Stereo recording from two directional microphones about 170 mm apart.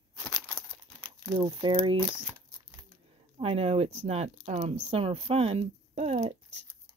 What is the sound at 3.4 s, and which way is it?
Speech, 35° right (ahead or behind).